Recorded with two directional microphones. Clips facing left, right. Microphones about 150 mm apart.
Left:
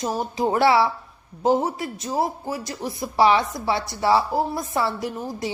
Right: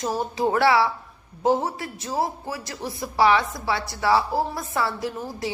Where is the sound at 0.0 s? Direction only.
20° left (ahead or behind).